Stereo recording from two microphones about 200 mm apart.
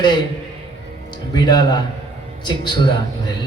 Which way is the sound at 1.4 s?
20° left (ahead or behind).